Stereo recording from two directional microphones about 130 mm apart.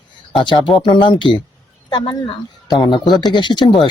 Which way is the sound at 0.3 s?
40° left (ahead or behind).